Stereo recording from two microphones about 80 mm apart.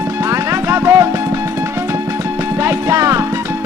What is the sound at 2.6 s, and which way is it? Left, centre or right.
Music, right.